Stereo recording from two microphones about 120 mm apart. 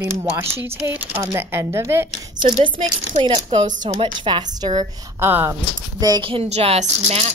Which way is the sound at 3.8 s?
45° right (ahead or behind).